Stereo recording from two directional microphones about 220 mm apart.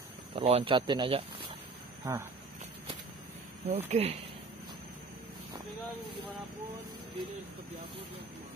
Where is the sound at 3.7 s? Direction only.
30° right (ahead or behind).